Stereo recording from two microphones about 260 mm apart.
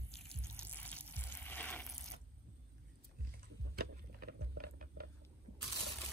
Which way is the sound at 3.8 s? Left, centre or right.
Right.